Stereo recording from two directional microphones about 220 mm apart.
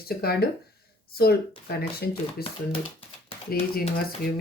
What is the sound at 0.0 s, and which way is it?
Speech, 45° left (ahead or behind).